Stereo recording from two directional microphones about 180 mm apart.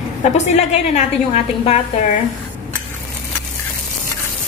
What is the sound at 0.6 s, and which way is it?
A woman's voice, 35° left (ahead or behind).